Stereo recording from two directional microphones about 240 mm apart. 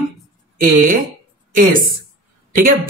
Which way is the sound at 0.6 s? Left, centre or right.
Right.